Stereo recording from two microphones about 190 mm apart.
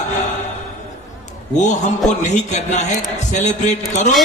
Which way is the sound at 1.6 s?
40° left (ahead or behind).